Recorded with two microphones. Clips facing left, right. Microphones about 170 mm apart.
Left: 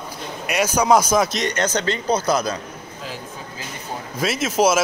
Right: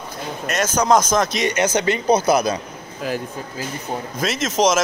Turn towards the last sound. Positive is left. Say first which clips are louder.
# even
turn(degrees=5)  # may be behind; listen again after turning